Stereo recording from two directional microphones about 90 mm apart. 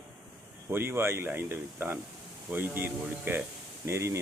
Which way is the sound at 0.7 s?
25° right (ahead or behind).